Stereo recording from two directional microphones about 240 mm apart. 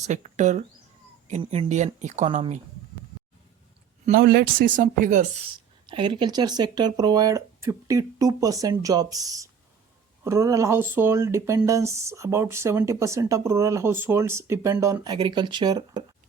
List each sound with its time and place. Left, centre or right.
0.0 s speech: right
4.0 s speech: right
5.8 s speech: right